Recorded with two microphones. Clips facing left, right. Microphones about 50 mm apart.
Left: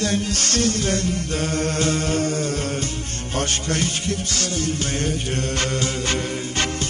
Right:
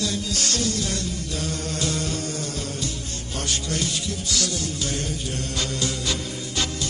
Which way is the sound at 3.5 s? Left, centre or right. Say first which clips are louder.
Left 3 dB; left.